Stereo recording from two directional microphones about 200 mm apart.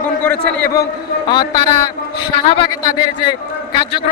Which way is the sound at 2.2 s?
25° left (ahead or behind).